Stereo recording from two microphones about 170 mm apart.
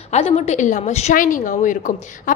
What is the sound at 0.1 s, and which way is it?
A woman's voice, 40° left (ahead or behind).